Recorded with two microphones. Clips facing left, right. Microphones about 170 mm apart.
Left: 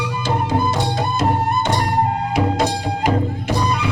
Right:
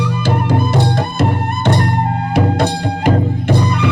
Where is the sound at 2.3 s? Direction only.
60° right (ahead or behind).